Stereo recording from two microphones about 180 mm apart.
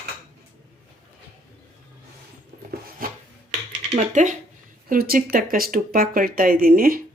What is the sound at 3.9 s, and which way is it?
Speech, 40° right (ahead or behind).